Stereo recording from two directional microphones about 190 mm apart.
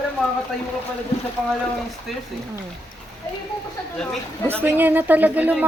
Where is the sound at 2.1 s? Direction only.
Centre (ahead or behind).